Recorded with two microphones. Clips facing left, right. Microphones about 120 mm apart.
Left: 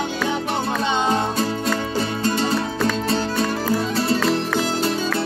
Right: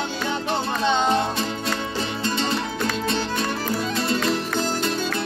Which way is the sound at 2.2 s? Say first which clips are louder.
Left 3 dB; 40° left (ahead or behind).